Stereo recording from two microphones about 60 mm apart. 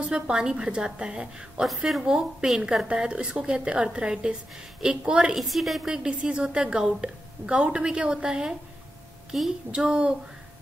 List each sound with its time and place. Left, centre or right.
0.0 s a woman's voice: centre
5.4 s a woman's voice: centre
6.0 s a woman's voice: centre
9.7 s a woman's voice: centre